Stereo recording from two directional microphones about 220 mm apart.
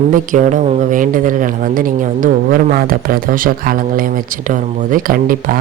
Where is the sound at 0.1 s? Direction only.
35° right (ahead or behind).